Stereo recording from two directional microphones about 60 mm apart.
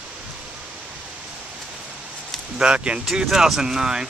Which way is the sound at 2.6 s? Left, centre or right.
Centre.